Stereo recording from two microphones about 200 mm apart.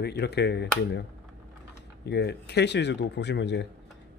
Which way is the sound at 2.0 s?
55° left (ahead or behind).